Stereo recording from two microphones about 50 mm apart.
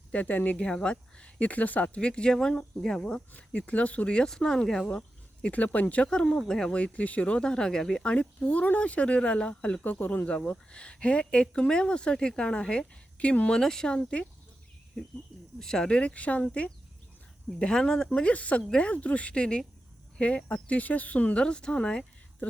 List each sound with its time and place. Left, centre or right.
0.1 s speech: left
0.6 s speech: centre
2.8 s speech: centre
3.7 s speech: left; by 4.9 s centre
4.9 s speech: left
6.5 s speech: centre
6.7 s speech: left; by 8.0 s centre
8.0 s speech: left
13.5 s speech: centre
15.5 s speech: centre
17.6 s speech: centre; by 21.3 s left
21.3 s speech: centre